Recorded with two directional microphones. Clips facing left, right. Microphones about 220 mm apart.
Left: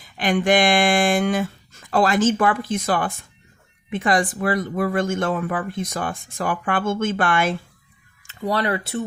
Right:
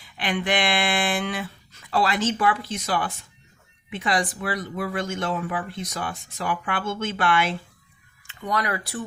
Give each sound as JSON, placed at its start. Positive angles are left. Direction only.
{"t": 0.0, "sound": "speech", "side_deg": 45}
{"t": 8.3, "sound": "speech", "side_deg": 35}